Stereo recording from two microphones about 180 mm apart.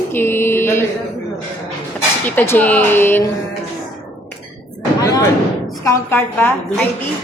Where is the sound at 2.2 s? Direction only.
10° left (ahead or behind).